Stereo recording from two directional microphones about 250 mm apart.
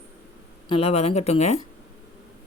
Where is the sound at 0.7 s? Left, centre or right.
Left.